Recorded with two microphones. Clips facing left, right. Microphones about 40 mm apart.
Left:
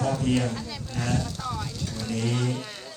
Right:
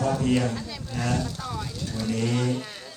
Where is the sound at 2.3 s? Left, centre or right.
Right.